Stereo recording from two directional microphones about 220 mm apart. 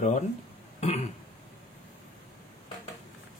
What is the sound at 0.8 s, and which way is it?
Throat clearing, 30° left (ahead or behind).